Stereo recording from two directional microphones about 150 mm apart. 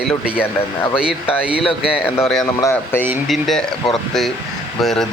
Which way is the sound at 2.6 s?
20° left (ahead or behind).